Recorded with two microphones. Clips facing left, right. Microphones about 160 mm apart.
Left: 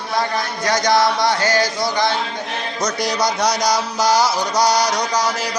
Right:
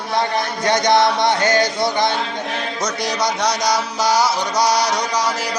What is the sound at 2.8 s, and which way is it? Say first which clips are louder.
A man's voice: left 2 dB; centre (ahead or behind).